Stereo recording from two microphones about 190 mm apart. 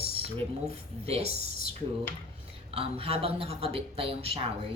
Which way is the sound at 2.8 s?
30° right (ahead or behind).